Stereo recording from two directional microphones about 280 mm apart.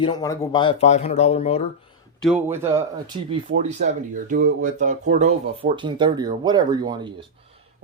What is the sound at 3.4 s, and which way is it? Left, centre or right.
Speech, right.